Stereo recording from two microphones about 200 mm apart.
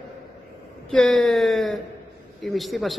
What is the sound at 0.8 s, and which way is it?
A man's voice, centre (ahead or behind).